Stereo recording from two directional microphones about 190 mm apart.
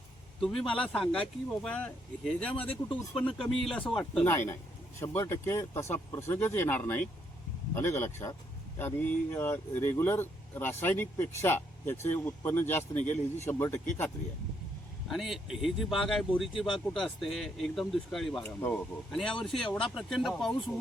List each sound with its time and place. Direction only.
0.3 s speech: centre (ahead or behind)
2.6 s speech: 30° left (ahead or behind)
3.2 s speech: 5° left (ahead or behind)
15.0 s speech: centre (ahead or behind)